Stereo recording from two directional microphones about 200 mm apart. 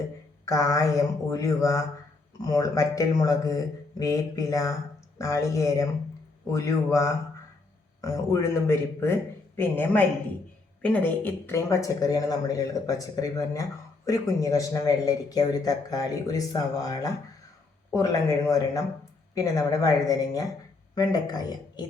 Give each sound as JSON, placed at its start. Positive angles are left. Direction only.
{"t": 0.4, "sound": "speech", "side_deg": 15}